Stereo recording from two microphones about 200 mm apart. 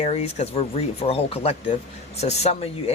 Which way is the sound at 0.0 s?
30° left (ahead or behind).